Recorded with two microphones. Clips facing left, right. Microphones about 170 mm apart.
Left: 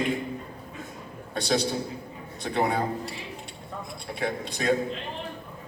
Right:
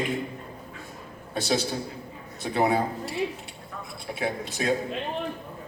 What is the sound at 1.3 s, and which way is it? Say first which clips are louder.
A man's voice: left 1 dB; 5° right (ahead or behind).